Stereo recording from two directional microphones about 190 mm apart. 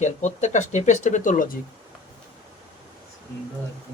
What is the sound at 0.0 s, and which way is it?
Speech, 40° left (ahead or behind).